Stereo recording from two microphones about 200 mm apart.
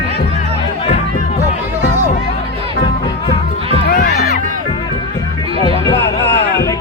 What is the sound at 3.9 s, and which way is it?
Music, 50° left (ahead or behind).